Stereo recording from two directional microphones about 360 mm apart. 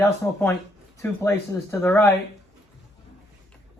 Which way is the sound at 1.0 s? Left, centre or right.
Centre.